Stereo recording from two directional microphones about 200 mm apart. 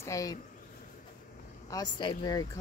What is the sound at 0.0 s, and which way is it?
Speech, 15° left (ahead or behind).